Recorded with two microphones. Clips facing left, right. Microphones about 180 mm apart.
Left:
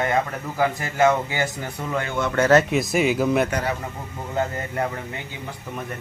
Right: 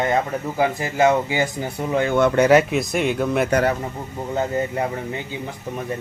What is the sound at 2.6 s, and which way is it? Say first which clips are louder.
Speech: left 1 dB; centre (ahead or behind).